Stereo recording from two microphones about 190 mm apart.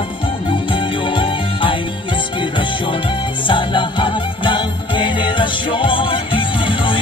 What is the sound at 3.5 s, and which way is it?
Jingle bell, 25° left (ahead or behind).